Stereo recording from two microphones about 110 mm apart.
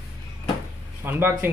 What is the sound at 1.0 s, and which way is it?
Speech, 20° right (ahead or behind).